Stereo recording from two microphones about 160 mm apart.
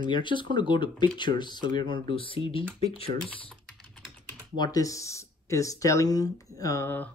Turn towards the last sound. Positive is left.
turn(degrees=15)  # may be behind; listen again after turning